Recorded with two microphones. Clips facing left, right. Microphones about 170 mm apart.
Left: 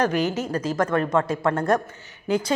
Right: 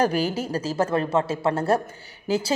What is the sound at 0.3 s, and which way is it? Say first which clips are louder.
Speech: left 1 dB; 10° right (ahead or behind).